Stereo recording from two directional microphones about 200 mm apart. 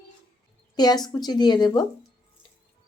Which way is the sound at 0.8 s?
20° left (ahead or behind).